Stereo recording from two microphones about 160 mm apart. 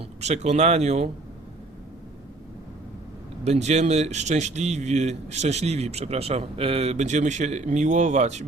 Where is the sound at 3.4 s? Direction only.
45° right (ahead or behind).